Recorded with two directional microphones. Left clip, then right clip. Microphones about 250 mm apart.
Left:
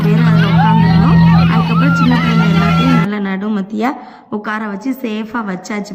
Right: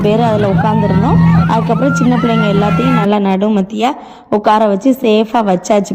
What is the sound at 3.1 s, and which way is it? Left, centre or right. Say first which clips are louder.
Speech: right 7 dB; centre.